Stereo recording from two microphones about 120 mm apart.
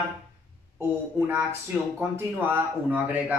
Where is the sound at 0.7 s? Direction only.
20° right (ahead or behind).